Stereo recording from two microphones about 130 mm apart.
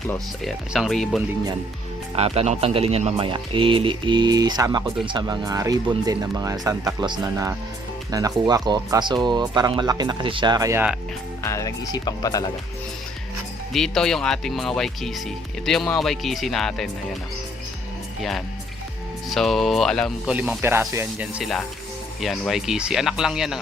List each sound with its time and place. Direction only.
0.4 s speech: centre (ahead or behind)
2.1 s a man's voice: 50° right (ahead or behind); by 10.8 s 30° right (ahead or behind)
11.4 s speech: 25° left (ahead or behind)
13.7 s speech: 5° left (ahead or behind)
18.2 s speech: centre (ahead or behind)
20.2 s speech: 10° right (ahead or behind)
21.3 s speech: centre (ahead or behind)